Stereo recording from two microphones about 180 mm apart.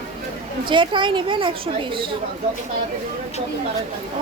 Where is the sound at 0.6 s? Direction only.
25° right (ahead or behind).